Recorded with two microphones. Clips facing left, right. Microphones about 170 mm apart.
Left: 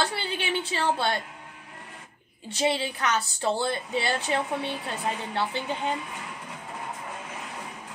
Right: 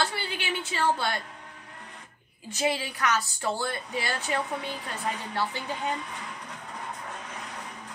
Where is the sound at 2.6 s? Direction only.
30° left (ahead or behind).